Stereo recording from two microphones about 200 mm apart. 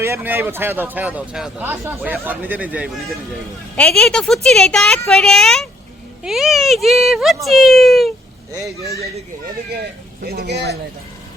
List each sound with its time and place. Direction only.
0.0 s a woman's voice: 10° right (ahead or behind)
10.2 s speech: 50° right (ahead or behind)